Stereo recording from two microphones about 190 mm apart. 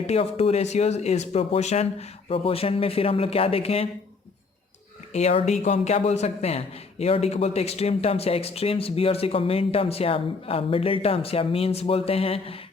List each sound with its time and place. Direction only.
0.1 s speech: 30° left (ahead or behind)
5.1 s speech: 35° left (ahead or behind)